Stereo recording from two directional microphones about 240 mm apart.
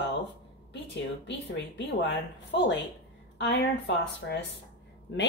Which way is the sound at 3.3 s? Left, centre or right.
Left.